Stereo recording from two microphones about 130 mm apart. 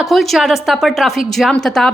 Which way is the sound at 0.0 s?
Centre (ahead or behind).